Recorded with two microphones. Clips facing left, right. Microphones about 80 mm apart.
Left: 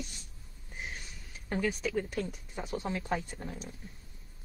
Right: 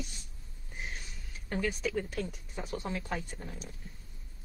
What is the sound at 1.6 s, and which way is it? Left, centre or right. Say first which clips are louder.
Speech: left 1 dB; centre.